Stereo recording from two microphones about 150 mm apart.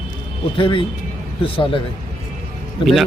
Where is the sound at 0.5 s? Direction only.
35° left (ahead or behind).